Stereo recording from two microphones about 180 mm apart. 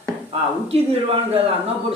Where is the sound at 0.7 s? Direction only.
35° right (ahead or behind).